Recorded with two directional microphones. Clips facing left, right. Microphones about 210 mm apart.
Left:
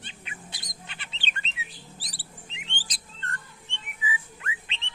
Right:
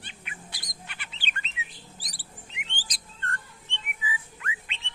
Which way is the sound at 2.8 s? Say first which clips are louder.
Right 2 dB; 25° left (ahead or behind).